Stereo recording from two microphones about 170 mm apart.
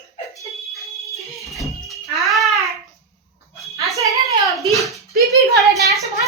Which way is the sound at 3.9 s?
20° right (ahead or behind).